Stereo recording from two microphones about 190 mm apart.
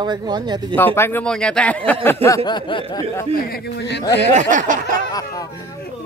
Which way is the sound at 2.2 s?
20° left (ahead or behind).